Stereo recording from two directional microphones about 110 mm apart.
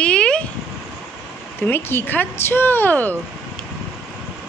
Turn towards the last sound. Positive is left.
turn(degrees=15)  # may be behind; listen again after turning